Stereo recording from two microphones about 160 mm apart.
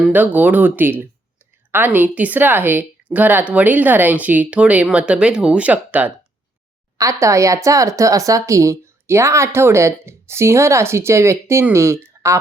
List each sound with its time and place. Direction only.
0.0 s speech: 10° right (ahead or behind)